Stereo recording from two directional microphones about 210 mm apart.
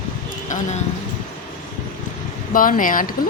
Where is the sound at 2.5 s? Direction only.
40° left (ahead or behind).